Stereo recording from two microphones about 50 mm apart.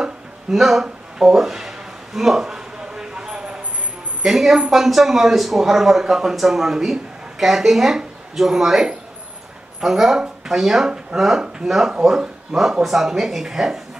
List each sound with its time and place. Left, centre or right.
0.5 s speech: centre
0.8 s a sound: centre
4.2 s a woman's voice: centre